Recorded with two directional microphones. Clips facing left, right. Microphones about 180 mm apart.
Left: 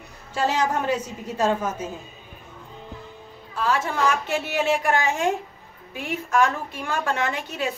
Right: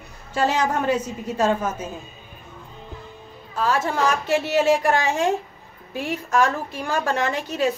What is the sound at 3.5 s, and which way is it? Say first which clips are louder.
A woman's voice: right 2 dB; 40° right (ahead or behind).